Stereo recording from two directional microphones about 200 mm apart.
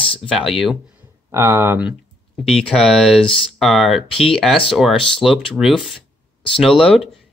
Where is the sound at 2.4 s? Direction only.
Centre (ahead or behind).